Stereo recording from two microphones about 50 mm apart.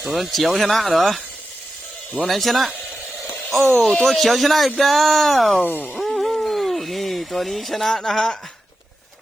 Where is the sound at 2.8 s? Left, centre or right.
Centre.